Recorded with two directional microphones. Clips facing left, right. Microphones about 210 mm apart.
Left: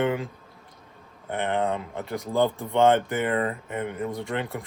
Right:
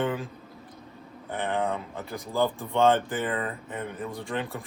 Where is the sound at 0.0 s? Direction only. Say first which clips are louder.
Left 3 dB; 15° left (ahead or behind).